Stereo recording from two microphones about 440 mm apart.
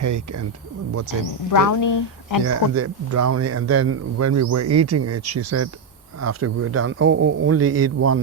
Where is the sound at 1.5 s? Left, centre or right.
Left.